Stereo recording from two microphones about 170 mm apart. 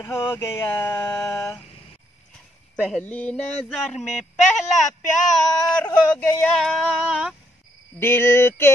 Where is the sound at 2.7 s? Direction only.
5° left (ahead or behind).